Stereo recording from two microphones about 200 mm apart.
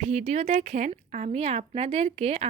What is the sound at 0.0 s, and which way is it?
Speech, 35° right (ahead or behind).